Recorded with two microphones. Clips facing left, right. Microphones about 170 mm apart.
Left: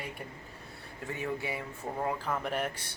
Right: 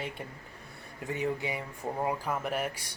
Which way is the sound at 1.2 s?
20° right (ahead or behind).